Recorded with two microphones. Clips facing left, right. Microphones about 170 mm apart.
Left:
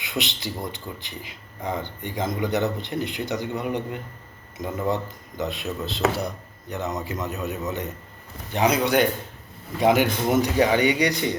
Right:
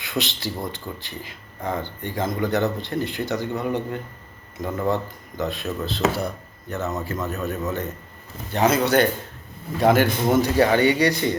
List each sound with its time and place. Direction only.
0.0 s speech: 20° left (ahead or behind)
5.4 s speech: 20° left (ahead or behind)